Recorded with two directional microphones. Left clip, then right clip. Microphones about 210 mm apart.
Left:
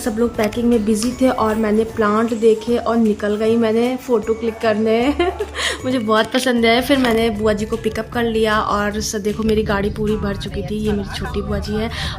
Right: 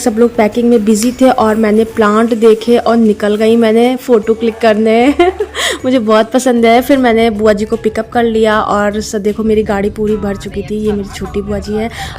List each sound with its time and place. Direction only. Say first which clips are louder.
0.0 s a woman's voice: right 9 dB; 30° right (ahead or behind)